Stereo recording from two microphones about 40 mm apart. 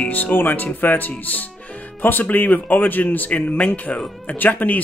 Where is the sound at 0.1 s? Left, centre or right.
Left.